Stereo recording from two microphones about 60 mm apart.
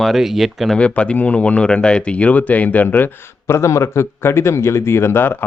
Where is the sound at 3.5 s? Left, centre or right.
Left.